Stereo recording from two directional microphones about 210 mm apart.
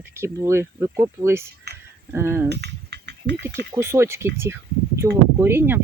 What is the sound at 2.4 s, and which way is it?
Mechanisms, 50° right (ahead or behind).